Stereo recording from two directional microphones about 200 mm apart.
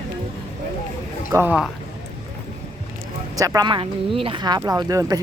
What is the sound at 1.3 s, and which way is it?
Speech, 10° right (ahead or behind).